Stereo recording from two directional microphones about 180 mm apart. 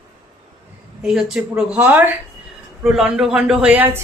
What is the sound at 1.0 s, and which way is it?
Speech, 5° right (ahead or behind).